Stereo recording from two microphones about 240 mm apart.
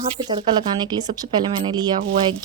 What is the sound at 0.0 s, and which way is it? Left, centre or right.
Speech, centre.